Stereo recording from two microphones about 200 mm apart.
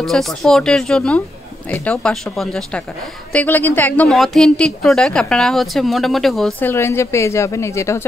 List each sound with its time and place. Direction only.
0.0 s a woman's voice: centre (ahead or behind)
6.7 s speech: 10° left (ahead or behind)